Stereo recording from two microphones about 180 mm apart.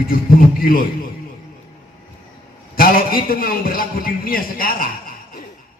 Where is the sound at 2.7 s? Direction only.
55° left (ahead or behind).